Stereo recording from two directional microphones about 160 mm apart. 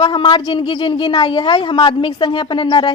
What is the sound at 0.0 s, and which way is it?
A woman's voice, 30° left (ahead or behind).